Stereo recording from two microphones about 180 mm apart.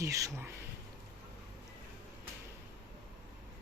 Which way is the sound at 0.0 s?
15° right (ahead or behind).